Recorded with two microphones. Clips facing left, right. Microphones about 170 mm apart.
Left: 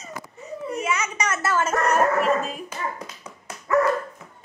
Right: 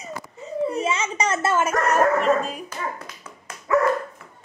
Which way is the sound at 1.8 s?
Centre (ahead or behind).